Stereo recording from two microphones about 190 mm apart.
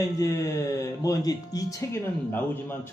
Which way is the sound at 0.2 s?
15° left (ahead or behind).